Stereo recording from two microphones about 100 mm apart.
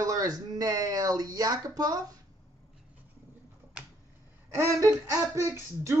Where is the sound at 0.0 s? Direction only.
35° right (ahead or behind).